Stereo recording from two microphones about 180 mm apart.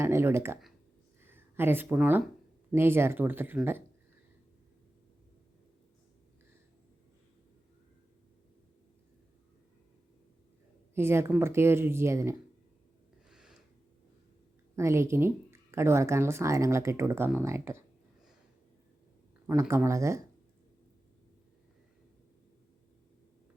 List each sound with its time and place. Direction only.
0.0 s speech: 15° right (ahead or behind)
10.9 s speech: 15° right (ahead or behind)
13.3 s a sound: 5° right (ahead or behind)
14.8 s speech: 15° right (ahead or behind)
19.5 s speech: 15° right (ahead or behind)